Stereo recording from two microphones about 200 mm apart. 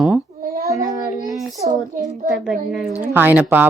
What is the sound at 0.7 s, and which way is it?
Child singing, 20° right (ahead or behind).